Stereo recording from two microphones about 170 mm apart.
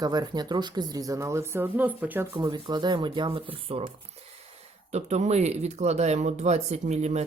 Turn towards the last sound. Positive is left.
turn(degrees=-40)  # may be behind; listen again after turning